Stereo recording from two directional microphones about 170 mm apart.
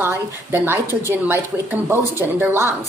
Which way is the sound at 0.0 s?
10° right (ahead or behind).